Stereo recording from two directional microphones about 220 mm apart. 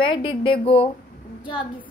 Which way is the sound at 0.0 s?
25° left (ahead or behind).